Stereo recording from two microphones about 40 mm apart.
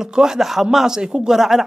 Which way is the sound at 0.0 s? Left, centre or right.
Centre.